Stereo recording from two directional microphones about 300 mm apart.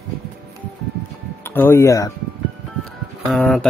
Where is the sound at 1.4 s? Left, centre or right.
Centre.